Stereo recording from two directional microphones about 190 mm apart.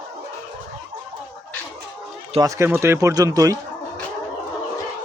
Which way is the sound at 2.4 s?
15° right (ahead or behind).